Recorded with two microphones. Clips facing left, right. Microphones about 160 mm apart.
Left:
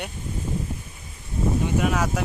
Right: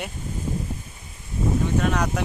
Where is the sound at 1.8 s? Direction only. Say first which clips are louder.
Even; 5° left (ahead or behind).